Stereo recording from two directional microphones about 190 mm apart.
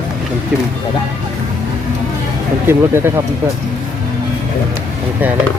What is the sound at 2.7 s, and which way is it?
Speech, 15° right (ahead or behind).